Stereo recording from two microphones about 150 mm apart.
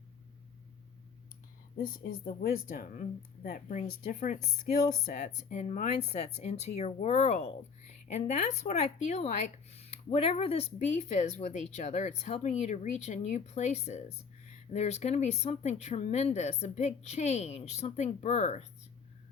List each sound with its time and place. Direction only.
1.7 s speech: 65° left (ahead or behind); by 18.6 s 50° left (ahead or behind)